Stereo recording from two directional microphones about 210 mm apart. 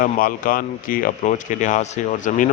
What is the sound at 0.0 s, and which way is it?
Speech, 40° left (ahead or behind).